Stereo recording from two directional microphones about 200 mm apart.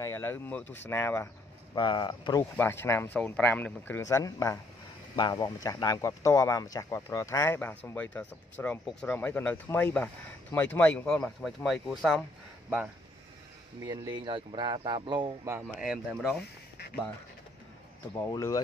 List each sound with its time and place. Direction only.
0.0 s speech: 10° left (ahead or behind)
1.8 s speech: 25° left (ahead or behind)
2.5 s speech: 10° left (ahead or behind); by 12.9 s 5° right (ahead or behind)
13.8 s speech: 20° right (ahead or behind)
15.5 s speech: 10° right (ahead or behind)
18.2 s speech: 15° left (ahead or behind)